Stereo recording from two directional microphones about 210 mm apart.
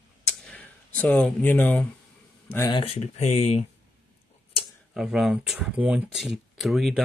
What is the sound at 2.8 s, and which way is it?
Speech, 30° left (ahead or behind).